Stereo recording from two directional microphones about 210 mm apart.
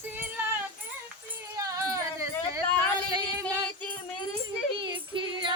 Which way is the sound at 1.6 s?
15° right (ahead or behind).